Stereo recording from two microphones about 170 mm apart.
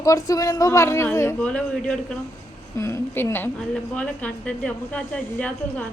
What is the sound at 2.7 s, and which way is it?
A man's voice, 15° left (ahead or behind).